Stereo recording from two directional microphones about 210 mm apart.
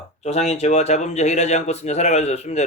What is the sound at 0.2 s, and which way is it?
Speech, 30° left (ahead or behind).